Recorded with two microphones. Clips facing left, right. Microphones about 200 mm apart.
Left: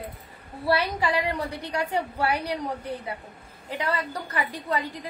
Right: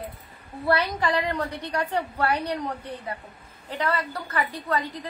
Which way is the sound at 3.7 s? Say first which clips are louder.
Right 1 dB; 10° left (ahead or behind).